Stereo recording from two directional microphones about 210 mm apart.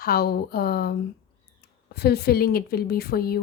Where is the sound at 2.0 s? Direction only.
50° left (ahead or behind).